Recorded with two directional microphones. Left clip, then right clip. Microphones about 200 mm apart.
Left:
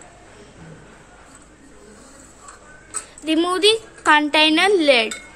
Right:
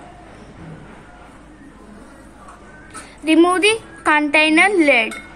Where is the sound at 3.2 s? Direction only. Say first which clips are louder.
Right 3 dB; 25° left (ahead or behind).